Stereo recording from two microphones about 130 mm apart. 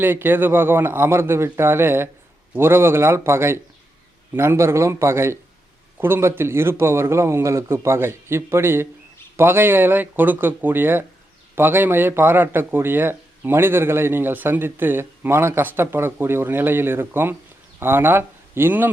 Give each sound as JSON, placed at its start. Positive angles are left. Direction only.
{"t": 0.0, "sound": "a man's voice", "side_deg": -15}